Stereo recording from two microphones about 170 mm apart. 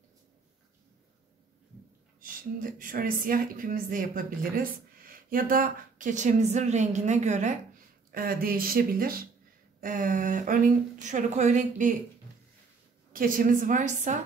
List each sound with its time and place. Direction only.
2.1 s a woman's voice: 55° right (ahead or behind)
8.1 s a woman's voice: 60° right (ahead or behind)
13.1 s speech: 55° right (ahead or behind)